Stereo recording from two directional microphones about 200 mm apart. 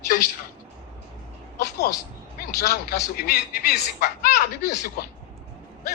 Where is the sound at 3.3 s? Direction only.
50° left (ahead or behind).